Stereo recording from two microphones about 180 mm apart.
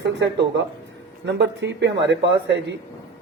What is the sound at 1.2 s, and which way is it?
Speech, 75° right (ahead or behind).